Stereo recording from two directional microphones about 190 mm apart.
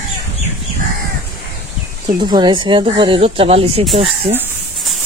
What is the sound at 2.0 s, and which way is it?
Speech, 20° right (ahead or behind).